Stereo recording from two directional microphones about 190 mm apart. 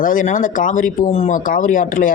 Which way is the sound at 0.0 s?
45° left (ahead or behind).